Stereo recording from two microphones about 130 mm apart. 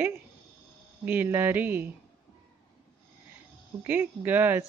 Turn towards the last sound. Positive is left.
turn(degrees=-15)  # may be behind; listen again after turning